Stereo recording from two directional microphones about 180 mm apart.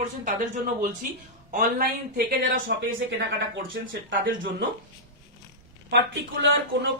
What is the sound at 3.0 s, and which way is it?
Speech, 80° right.